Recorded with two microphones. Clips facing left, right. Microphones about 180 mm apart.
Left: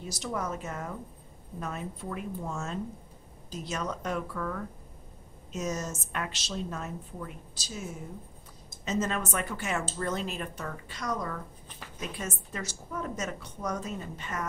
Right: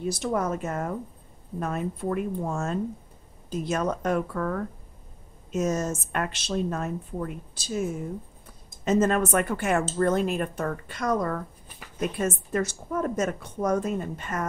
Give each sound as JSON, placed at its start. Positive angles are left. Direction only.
{"t": 0.0, "sound": "a woman's voice", "side_deg": -55}